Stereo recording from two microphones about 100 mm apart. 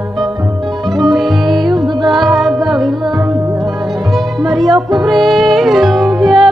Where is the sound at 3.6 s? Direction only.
Centre (ahead or behind).